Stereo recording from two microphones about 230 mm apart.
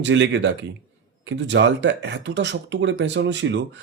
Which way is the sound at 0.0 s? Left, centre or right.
Right.